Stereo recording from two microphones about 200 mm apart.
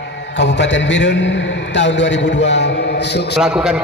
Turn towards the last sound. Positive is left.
turn(degrees=-5)  # may be behind; listen again after turning